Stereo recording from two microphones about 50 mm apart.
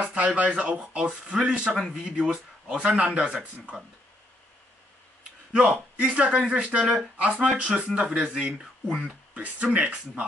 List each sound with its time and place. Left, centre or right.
0.0 s speech: right
5.5 s speech: centre